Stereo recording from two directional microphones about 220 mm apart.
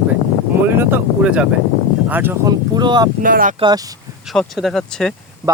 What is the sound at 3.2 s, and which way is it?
Speech, 40° right (ahead or behind).